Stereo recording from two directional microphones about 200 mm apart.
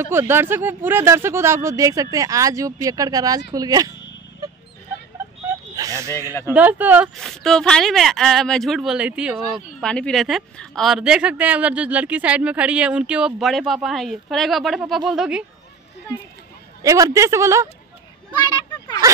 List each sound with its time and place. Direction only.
0.0 s speech: 10° right (ahead or behind)
4.4 s dog: 20° right (ahead or behind)
5.5 s a sound: 15° right (ahead or behind)
6.5 s speech: 5° right (ahead or behind)
7.2 s a woman's voice: centre (ahead or behind)
16.8 s speech: 15° right (ahead or behind)